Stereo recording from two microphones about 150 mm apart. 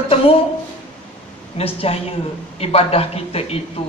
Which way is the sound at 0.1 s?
40° left (ahead or behind).